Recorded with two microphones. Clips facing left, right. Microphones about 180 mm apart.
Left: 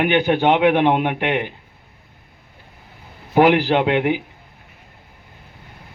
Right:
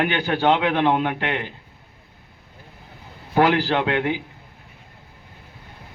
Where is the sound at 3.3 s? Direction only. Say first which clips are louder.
Left 4 dB; 20° left (ahead or behind).